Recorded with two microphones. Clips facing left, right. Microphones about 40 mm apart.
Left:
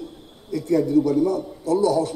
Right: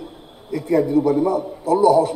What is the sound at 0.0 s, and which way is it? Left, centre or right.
A man's voice, centre.